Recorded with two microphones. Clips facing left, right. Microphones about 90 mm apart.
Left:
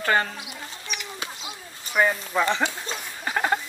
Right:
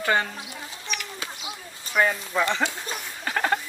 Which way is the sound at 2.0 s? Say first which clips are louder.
Left 1 dB; 10° left (ahead or behind).